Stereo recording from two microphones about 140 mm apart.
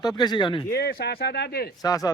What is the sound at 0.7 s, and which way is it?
Speech, 90° left.